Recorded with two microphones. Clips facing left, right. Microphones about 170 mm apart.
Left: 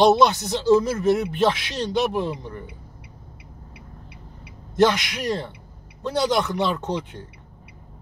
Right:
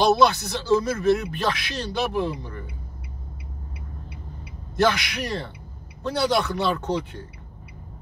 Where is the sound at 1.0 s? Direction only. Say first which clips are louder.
Left 2 dB; 20° left (ahead or behind).